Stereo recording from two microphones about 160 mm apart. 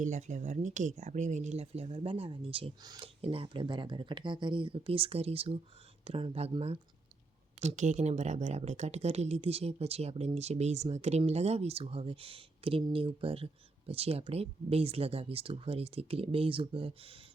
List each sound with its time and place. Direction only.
0.0 s speech: 50° right (ahead or behind)
2.8 s speech: 25° right (ahead or behind)
3.2 s speech: 35° right (ahead or behind)